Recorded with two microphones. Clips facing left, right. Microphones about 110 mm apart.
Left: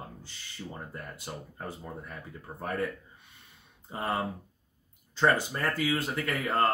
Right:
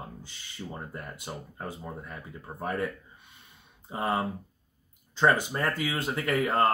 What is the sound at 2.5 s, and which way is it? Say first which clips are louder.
Speech: right 3 dB; 30° right (ahead or behind).